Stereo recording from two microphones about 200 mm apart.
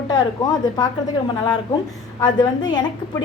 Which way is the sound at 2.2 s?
20° left (ahead or behind).